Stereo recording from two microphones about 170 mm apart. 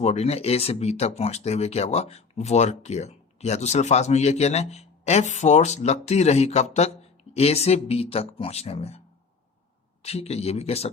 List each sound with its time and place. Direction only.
0.0 s speech: 40° left (ahead or behind)
10.0 s speech: 35° left (ahead or behind)